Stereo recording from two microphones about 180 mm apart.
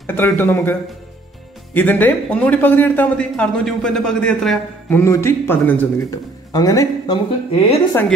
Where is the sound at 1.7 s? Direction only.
10° left (ahead or behind).